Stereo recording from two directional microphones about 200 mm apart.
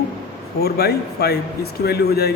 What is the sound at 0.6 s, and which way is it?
Speech, 55° left (ahead or behind).